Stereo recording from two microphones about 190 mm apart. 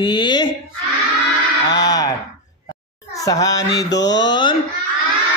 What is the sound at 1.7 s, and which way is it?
Speech, 20° left (ahead or behind).